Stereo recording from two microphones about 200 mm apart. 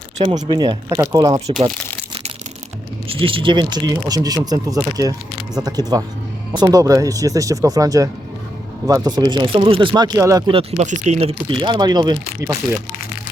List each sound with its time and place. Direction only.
0.2 s speech: 30° right (ahead or behind)
3.1 s speech: 25° right (ahead or behind)